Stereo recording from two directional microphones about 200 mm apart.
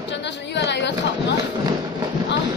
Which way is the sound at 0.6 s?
60° left (ahead or behind).